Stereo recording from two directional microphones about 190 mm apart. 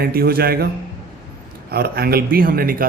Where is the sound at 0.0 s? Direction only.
55° right (ahead or behind).